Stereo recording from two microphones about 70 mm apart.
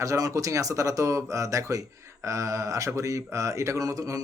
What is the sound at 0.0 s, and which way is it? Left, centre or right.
Speech, right.